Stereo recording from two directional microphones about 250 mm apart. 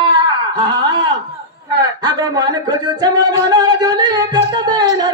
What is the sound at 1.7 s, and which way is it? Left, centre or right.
Singing, centre.